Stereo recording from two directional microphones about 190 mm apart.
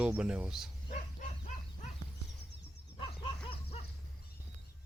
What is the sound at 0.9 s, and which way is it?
Livestock, 40° left (ahead or behind).